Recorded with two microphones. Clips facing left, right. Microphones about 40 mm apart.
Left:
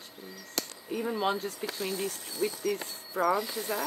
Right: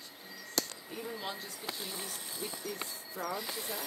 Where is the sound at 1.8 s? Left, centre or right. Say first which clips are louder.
Left 9 dB; left.